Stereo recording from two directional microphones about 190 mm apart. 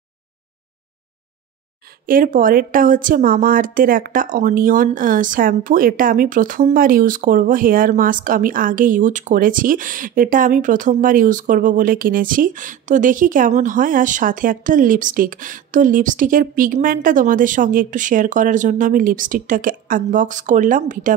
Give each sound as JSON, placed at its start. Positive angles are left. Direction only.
{"t": 2.0, "sound": "speech", "side_deg": -45}